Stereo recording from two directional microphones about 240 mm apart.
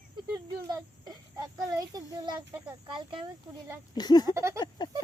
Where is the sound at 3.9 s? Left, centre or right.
Centre.